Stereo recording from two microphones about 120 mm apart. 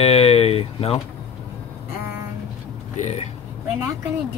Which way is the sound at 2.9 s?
80° left.